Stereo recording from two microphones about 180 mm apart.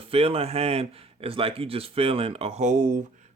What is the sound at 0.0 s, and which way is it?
Speech, 30° right (ahead or behind).